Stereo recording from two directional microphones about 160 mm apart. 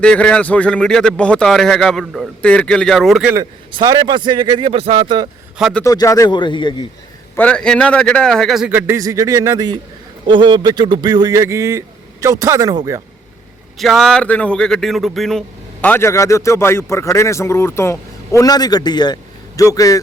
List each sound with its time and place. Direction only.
0.0 s a man's voice: 5° left (ahead or behind)
3.7 s a man's voice: 25° right (ahead or behind)
5.5 s a man's voice: centre (ahead or behind)
5.8 s a man's voice: 20° left (ahead or behind)
7.3 s a man's voice: 5° left (ahead or behind)
8.7 s a man's voice: 20° right (ahead or behind)
13.7 s speech: centre (ahead or behind); by 20.0 s 20° left (ahead or behind)